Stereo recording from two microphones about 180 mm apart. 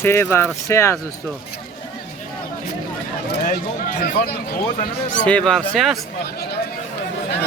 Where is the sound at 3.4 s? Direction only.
50° left (ahead or behind).